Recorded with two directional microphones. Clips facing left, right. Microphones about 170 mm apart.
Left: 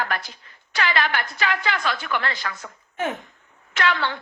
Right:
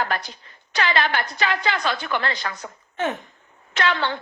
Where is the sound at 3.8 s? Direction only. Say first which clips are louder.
Right 1 dB; 30° right (ahead or behind).